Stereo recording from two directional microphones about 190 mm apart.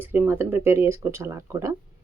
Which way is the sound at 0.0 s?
10° right (ahead or behind).